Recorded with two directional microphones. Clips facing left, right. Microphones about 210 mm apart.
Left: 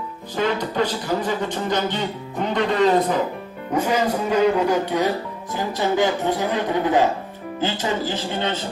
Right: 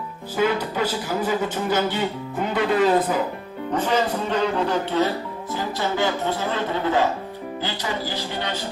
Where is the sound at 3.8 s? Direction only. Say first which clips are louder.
Left 2 dB; 10° left (ahead or behind).